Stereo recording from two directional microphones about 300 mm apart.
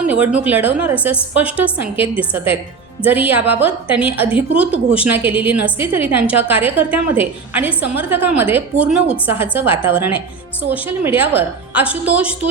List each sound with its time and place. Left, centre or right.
0.1 s a woman's voice: centre